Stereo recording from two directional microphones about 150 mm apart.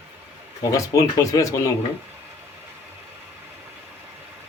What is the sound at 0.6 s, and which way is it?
Speech, 20° left (ahead or behind).